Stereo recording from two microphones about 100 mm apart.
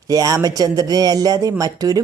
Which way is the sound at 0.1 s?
35° right (ahead or behind).